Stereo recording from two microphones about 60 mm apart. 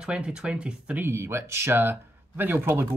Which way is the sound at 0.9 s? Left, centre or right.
Right.